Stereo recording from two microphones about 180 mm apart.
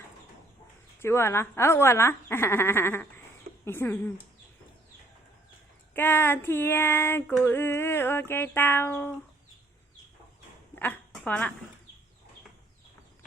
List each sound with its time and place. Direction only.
1.0 s speech: 15° left (ahead or behind)
5.9 s speech: 10° left (ahead or behind)
10.8 s a sound: 5° left (ahead or behind)